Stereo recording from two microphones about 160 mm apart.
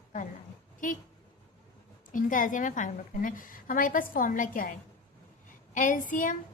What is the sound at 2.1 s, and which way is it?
A woman's voice, 55° left (ahead or behind).